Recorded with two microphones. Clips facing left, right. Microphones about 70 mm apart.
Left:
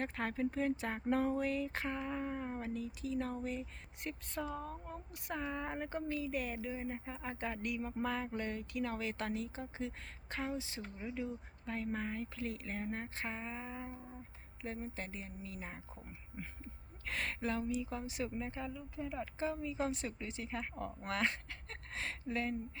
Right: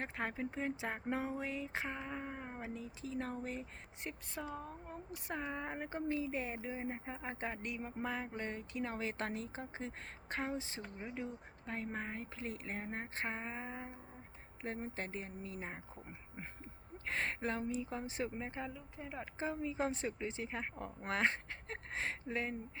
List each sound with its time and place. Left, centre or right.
0.0 s speech: right
4.0 s speech: centre
4.9 s speech: right
6.1 s speech: right